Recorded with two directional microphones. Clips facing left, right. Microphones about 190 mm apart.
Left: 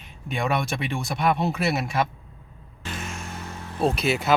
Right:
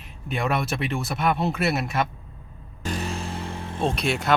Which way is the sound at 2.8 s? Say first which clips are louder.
Right 6 dB; 35° right (ahead or behind).